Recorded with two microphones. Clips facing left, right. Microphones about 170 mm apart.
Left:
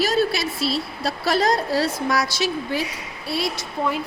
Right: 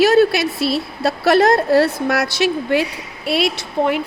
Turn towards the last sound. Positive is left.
turn(degrees=-65)  # may be behind; listen again after turning